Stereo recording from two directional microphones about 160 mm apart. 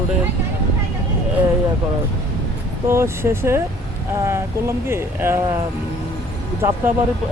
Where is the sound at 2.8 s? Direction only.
15° right (ahead or behind).